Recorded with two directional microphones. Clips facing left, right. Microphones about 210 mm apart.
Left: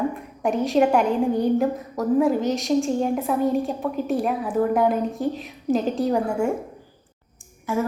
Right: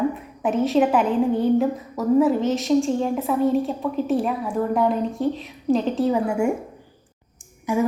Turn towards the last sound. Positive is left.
turn(degrees=-15)  # may be behind; listen again after turning